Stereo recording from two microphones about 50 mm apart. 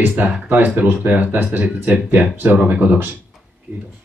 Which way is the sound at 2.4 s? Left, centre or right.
Right.